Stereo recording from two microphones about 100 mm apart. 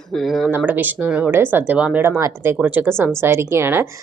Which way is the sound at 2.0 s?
25° right (ahead or behind).